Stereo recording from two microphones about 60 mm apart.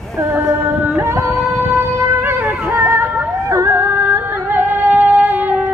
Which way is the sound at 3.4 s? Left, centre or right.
Right.